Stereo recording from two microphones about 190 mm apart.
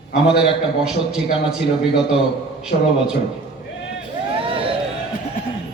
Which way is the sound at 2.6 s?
5° right (ahead or behind).